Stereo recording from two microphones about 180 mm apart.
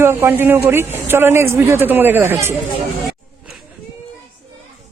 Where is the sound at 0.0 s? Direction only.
15° right (ahead or behind).